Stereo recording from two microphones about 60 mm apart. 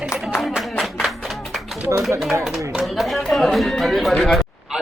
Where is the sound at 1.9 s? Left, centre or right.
Right.